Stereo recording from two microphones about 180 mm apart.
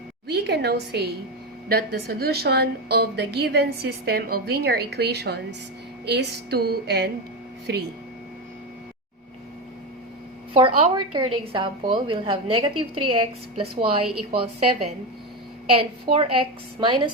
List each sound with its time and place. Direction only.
0.3 s a woman's voice: 65° right (ahead or behind)
10.5 s a woman's voice: 30° right (ahead or behind)
16.1 s a woman's voice: 30° right (ahead or behind)